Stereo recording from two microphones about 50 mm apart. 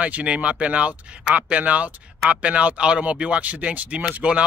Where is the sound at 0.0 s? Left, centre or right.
Right.